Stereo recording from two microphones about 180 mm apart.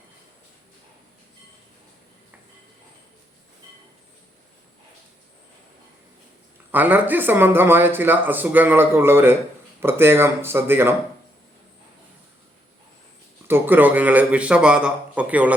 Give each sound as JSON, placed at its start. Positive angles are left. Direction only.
{"t": 6.7, "sound": "speech", "side_deg": -10}
{"t": 13.5, "sound": "speech", "side_deg": -10}